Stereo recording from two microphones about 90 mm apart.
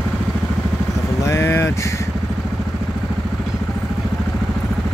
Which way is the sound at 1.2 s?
30° left (ahead or behind).